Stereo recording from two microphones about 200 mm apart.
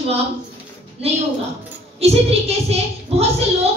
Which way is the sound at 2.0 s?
30° right (ahead or behind).